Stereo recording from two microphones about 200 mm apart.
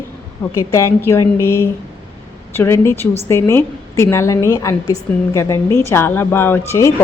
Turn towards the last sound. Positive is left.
turn(degrees=15)  # may be behind; listen again after turning